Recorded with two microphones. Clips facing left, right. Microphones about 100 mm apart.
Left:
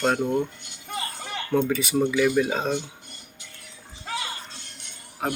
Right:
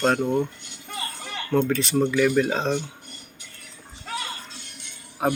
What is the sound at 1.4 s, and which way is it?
Speech, 10° left (ahead or behind).